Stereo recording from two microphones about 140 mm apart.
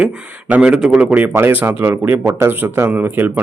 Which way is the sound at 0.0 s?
10° right (ahead or behind).